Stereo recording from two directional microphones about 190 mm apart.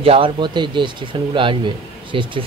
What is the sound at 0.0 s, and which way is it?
Speech, 30° right (ahead or behind).